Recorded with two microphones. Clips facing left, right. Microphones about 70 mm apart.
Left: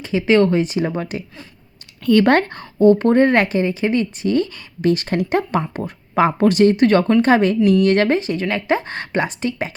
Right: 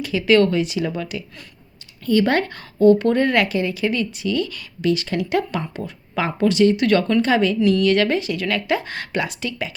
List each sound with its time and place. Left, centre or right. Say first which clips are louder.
0.0 s speech: left 1 dB; left
2.0 s speech: left 4 dB; left
2.5 s speech: left 1 dB; left